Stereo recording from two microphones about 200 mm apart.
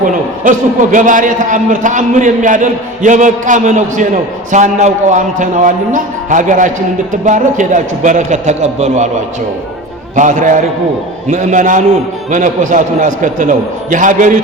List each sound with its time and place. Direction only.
0.0 s a man's voice: 40° right (ahead or behind)
10.2 s a man's voice: 40° right (ahead or behind)